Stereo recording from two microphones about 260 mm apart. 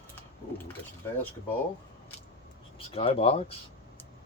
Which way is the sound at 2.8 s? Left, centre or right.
Left.